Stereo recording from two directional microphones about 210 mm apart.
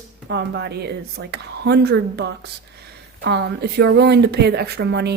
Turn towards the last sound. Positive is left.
turn(degrees=-50)  # may be behind; listen again after turning